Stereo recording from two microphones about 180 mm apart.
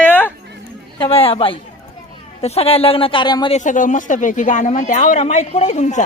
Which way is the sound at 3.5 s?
45° left (ahead or behind).